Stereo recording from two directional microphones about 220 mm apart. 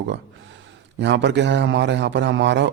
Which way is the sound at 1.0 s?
55° right (ahead or behind).